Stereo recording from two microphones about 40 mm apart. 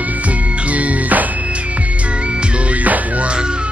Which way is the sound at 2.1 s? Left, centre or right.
Right.